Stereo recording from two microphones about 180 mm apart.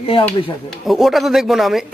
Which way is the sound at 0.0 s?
30° left (ahead or behind).